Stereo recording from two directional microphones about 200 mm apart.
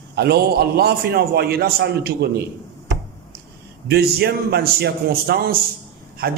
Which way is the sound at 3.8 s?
55° right (ahead or behind).